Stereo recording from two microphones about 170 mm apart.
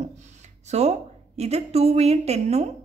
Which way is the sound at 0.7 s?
40° right (ahead or behind).